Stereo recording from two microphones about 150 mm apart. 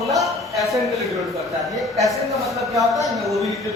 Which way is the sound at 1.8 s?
Centre (ahead or behind).